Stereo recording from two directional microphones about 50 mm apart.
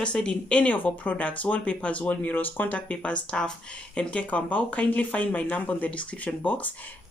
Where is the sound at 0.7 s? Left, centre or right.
Left.